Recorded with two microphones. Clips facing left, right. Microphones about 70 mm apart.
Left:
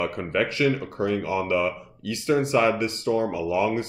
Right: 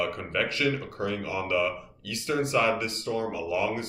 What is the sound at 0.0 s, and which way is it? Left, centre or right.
Speech, left.